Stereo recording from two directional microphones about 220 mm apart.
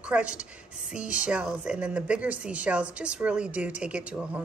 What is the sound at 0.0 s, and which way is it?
Speech, 5° right (ahead or behind).